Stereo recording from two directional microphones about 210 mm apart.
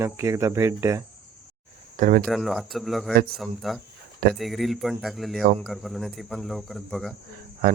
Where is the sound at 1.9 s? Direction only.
40° right (ahead or behind).